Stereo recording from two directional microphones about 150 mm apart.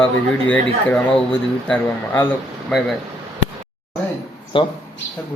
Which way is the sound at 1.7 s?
15° left (ahead or behind).